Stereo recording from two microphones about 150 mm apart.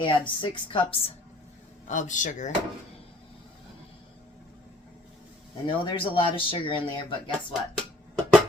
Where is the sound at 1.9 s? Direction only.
55° left (ahead or behind).